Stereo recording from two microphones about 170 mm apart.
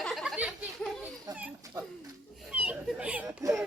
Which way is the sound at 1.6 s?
20° right (ahead or behind).